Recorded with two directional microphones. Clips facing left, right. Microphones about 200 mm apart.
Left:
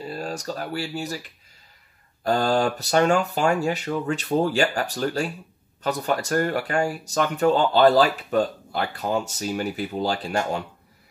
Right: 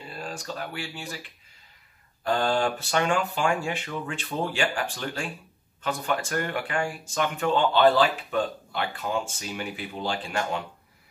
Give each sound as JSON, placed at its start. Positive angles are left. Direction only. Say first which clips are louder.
{"t": 0.0, "sound": "speech", "louder": "left 6 dB", "side_deg": 40}
{"t": 2.2, "sound": "speech", "louder": "left 3 dB", "side_deg": 40}